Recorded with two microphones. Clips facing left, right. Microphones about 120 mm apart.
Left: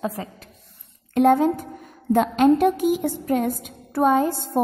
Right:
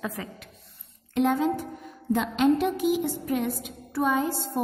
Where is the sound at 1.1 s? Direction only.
45° left (ahead or behind).